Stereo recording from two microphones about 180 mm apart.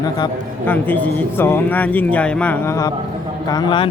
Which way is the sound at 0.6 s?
10° left (ahead or behind).